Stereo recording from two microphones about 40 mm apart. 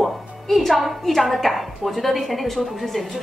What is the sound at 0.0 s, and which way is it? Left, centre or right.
A woman's voice, centre.